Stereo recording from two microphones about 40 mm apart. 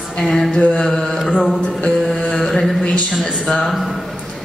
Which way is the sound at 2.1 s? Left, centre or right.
Left.